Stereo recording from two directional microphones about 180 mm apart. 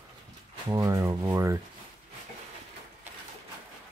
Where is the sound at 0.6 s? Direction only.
20° right (ahead or behind).